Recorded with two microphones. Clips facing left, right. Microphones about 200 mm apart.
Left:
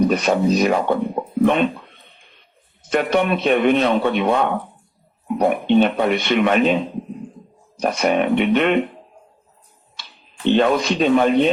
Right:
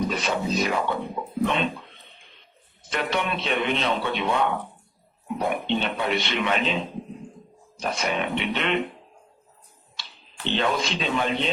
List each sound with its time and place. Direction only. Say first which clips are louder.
0.1 s speech: left 9 dB; 50° left (ahead or behind)
2.9 s speech: left 9 dB; 50° left (ahead or behind)
7.8 s speech: left 9 dB; 50° left (ahead or behind)
10.4 s speech: left 9 dB; 50° left (ahead or behind)